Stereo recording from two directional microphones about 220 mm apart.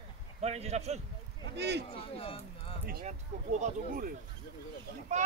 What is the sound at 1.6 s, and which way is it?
Speech, 50° right (ahead or behind).